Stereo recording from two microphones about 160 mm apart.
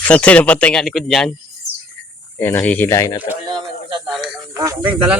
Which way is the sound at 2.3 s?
15° left (ahead or behind).